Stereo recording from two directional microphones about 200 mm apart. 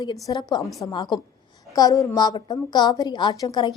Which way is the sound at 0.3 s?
20° left (ahead or behind).